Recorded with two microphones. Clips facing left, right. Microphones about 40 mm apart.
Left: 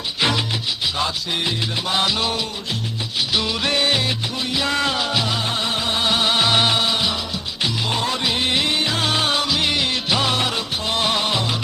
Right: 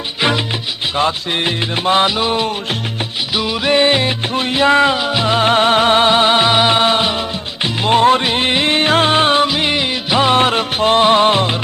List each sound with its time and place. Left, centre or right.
0.2 s music: right
0.9 s music: right
2.0 s music: right
4.4 s music: right
5.2 s music: right
6.7 s music: right
10.4 s music: right